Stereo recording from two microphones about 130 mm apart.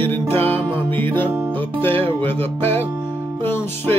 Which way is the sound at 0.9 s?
15° left (ahead or behind).